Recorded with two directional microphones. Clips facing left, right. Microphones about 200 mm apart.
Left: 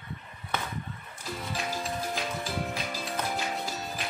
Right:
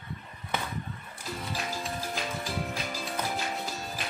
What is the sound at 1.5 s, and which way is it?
Music, centre (ahead or behind).